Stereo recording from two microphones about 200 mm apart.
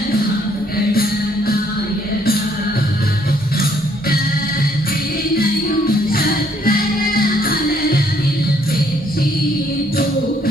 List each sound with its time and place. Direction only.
6.1 s music: 45° left (ahead or behind)